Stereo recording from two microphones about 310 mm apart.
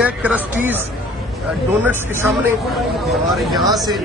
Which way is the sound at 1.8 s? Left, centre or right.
Centre.